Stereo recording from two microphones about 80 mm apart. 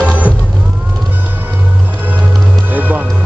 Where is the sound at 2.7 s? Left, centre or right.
Right.